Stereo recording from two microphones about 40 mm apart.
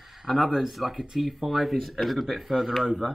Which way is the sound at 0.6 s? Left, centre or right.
Centre.